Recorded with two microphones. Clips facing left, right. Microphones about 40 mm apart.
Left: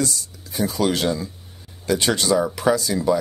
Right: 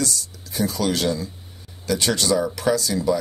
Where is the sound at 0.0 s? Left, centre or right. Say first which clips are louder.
Left 1 dB; centre.